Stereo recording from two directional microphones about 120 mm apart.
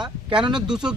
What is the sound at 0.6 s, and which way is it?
Speech, 5° right (ahead or behind).